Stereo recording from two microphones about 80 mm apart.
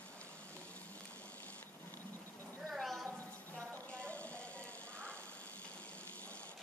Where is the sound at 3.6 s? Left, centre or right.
Centre.